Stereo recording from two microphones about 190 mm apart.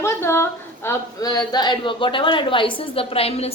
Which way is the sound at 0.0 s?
15° left (ahead or behind).